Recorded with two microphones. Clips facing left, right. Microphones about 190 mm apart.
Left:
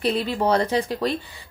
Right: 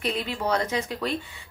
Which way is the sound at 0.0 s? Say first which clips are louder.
Left 6 dB; 35° left (ahead or behind).